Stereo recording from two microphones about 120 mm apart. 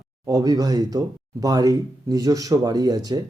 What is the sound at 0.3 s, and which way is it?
Speech, 30° right (ahead or behind).